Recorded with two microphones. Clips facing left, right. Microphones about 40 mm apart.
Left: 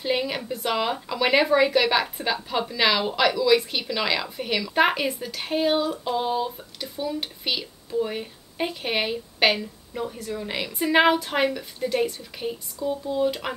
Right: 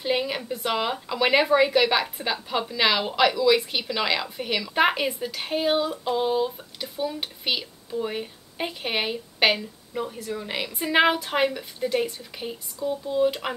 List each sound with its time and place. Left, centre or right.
0.0 s speech: centre